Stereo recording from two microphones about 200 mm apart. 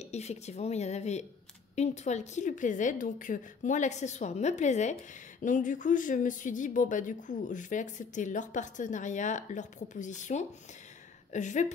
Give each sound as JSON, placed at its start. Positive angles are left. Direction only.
{"t": 0.0, "sound": "speech", "side_deg": 35}